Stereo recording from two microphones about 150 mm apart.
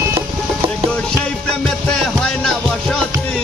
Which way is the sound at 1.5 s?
5° left (ahead or behind).